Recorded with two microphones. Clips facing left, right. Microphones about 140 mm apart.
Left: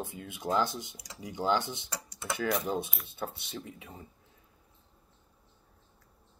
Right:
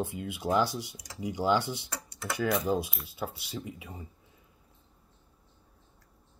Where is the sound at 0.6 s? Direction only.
20° left (ahead or behind).